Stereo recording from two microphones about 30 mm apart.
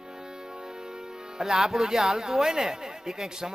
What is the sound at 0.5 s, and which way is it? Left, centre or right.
Speech, right.